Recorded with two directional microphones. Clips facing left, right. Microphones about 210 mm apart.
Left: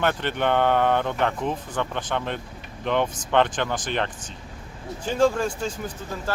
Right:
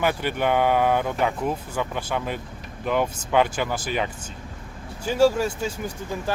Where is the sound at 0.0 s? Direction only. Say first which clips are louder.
Even; 10° right (ahead or behind).